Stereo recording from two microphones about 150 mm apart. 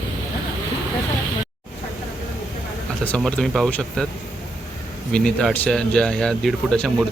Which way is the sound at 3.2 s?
5° left (ahead or behind).